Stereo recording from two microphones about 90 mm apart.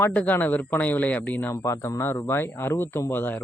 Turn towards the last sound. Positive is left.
turn(degrees=25)  # may be behind; listen again after turning